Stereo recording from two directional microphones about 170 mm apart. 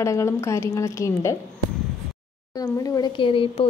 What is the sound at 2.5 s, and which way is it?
Speech, 25° left (ahead or behind).